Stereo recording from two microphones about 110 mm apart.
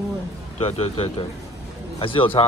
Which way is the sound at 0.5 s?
65° left (ahead or behind).